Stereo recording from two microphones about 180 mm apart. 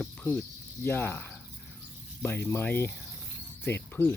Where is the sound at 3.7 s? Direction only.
10° left (ahead or behind).